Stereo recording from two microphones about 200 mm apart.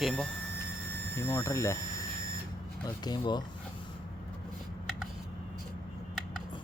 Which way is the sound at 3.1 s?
20° left (ahead or behind).